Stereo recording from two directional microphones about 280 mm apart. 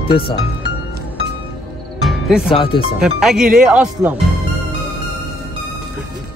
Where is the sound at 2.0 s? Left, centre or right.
Centre.